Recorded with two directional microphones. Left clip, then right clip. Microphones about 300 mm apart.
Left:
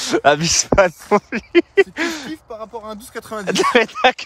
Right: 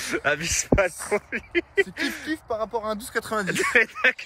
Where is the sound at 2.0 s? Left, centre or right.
Left.